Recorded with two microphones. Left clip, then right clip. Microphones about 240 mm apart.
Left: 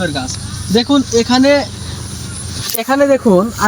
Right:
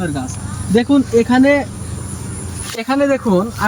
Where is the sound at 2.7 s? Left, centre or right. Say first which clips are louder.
Left 3 dB; centre.